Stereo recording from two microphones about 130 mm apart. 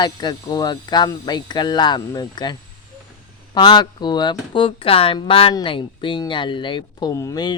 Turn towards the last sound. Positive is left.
turn(degrees=30)  # may be behind; listen again after turning